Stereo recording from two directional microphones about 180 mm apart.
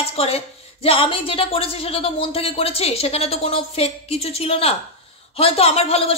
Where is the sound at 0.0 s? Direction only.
35° left (ahead or behind).